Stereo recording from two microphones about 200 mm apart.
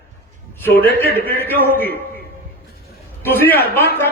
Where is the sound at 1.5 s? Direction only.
10° left (ahead or behind).